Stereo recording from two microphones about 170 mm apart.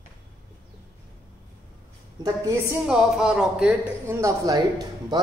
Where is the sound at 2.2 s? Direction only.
20° right (ahead or behind).